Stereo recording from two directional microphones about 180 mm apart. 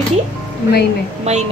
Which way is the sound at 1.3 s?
35° right (ahead or behind).